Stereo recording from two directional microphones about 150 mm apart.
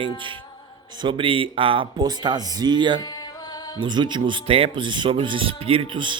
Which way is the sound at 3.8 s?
30° right (ahead or behind).